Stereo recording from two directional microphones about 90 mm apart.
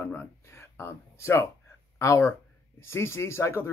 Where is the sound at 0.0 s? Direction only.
25° left (ahead or behind).